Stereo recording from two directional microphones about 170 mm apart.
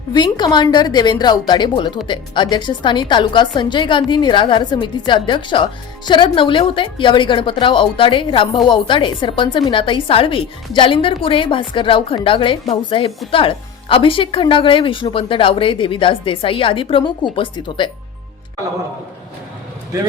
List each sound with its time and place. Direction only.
0.1 s a woman's voice: 25° left (ahead or behind)